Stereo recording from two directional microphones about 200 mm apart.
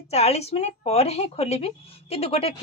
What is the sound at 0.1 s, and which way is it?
A woman's voice, 30° left (ahead or behind).